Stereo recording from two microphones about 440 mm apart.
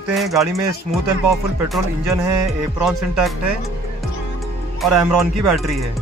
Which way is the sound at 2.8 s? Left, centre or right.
Centre.